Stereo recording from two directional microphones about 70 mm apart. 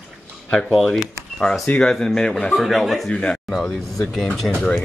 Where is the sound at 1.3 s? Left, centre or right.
Centre.